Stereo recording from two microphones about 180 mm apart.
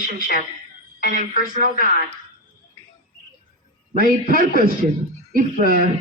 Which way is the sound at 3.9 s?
50° right (ahead or behind).